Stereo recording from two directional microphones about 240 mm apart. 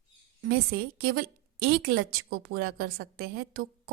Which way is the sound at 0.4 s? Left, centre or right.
Right.